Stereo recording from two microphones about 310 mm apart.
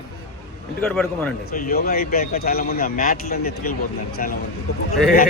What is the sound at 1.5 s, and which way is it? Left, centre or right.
A man's voice, left.